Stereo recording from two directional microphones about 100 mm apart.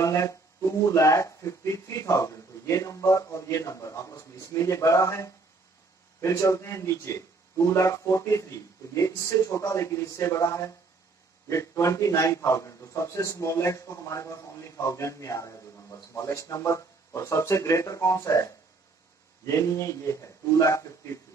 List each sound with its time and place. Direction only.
0.0 s a man's voice: 30° left (ahead or behind)